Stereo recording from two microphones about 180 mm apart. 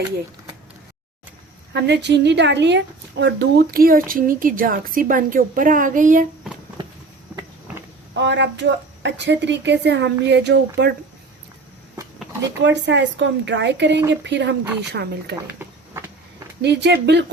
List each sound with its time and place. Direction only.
1.7 s a woman's voice: 70° right (ahead or behind); by 6.2 s 45° right (ahead or behind)
8.1 s a woman's voice: 75° right (ahead or behind)
12.6 s a woman's voice: 75° right (ahead or behind)
14.9 s speech: 65° right (ahead or behind)
15.4 s a sound: 10° right (ahead or behind)
16.6 s a woman's voice: 70° right (ahead or behind)